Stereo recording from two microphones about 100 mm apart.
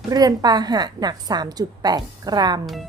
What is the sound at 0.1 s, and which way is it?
A woman's voice, 40° right (ahead or behind).